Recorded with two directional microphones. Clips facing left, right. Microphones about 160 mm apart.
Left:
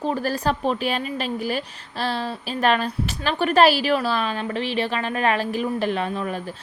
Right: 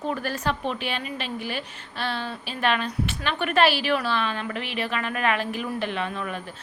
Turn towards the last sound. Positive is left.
turn(degrees=35)  # may be behind; listen again after turning